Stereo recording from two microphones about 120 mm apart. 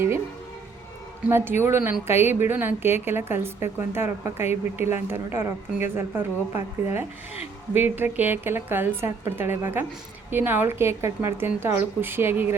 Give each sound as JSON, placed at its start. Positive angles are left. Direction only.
{"t": 1.3, "sound": "a woman's voice", "side_deg": -20}